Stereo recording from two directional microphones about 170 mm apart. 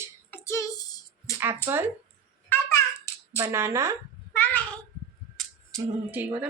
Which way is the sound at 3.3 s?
15° right (ahead or behind).